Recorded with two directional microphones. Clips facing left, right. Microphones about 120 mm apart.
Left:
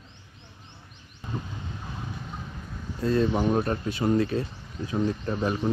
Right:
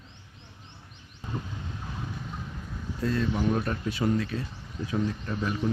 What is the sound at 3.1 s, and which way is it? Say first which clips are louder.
Speech: left 4 dB; 30° left (ahead or behind).